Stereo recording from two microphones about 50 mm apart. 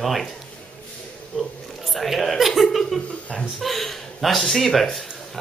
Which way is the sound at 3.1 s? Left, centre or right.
Left.